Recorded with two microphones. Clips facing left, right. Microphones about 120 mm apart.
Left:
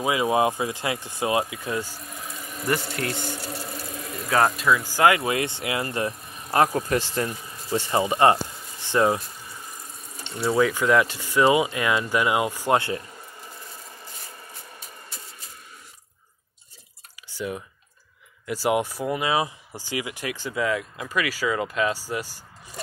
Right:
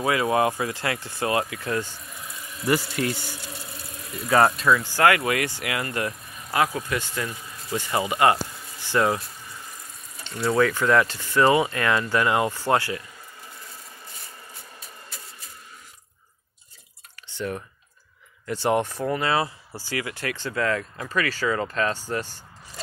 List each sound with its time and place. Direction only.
0.0 s speech: 15° left (ahead or behind)
3.3 s a sound: 40° left (ahead or behind)
4.3 s speech: centre (ahead or behind); by 6.4 s 25° left (ahead or behind)
6.5 s speech: 35° left (ahead or behind); by 9.2 s 20° left (ahead or behind)
10.3 s speech: 15° left (ahead or behind)
17.3 s speech: 10° left (ahead or behind)